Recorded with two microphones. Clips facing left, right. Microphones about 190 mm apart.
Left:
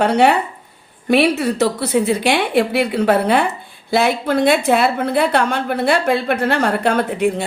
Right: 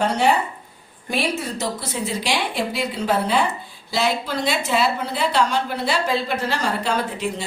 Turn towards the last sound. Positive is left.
turn(degrees=55)  # may be behind; listen again after turning